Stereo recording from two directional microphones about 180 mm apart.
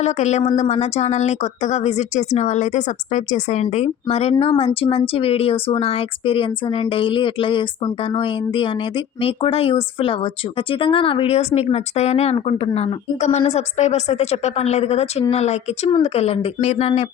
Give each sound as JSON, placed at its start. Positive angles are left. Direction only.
{"t": 0.0, "sound": "speech", "side_deg": 40}